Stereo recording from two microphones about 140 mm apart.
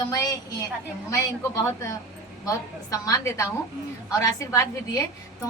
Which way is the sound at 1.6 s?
20° left (ahead or behind).